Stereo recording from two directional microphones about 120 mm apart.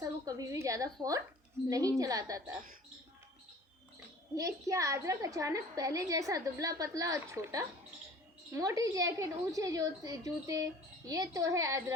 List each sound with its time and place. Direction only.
0.0 s a woman's voice: 30° right (ahead or behind)
4.4 s a woman's voice: 25° right (ahead or behind)